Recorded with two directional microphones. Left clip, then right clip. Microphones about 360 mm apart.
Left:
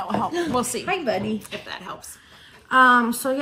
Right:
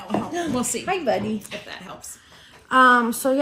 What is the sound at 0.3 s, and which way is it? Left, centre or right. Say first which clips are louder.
Speech: left 1 dB; centre.